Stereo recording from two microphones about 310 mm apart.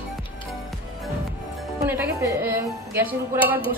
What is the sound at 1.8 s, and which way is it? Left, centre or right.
Speech, centre.